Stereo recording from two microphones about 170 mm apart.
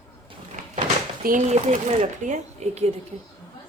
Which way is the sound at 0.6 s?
50° right (ahead or behind).